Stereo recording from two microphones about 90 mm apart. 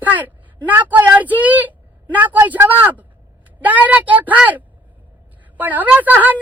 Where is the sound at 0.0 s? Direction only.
20° right (ahead or behind).